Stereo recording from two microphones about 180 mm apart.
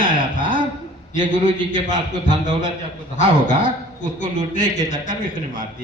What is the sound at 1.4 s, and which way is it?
A man's voice, 45° left (ahead or behind).